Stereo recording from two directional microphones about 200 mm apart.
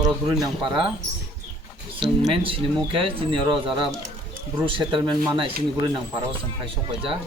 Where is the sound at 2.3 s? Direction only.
25° right (ahead or behind).